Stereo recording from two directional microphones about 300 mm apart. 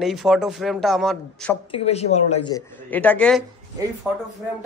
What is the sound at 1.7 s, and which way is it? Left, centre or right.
A woman's voice, centre.